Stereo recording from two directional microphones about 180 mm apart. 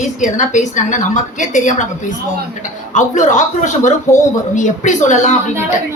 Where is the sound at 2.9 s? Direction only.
45° left (ahead or behind).